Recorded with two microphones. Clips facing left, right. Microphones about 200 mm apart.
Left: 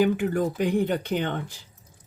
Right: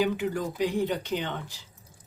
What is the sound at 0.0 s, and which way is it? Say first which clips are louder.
Speech: left 5 dB; 55° left (ahead or behind).